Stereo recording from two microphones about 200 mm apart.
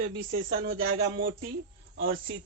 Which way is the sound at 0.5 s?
50° right (ahead or behind).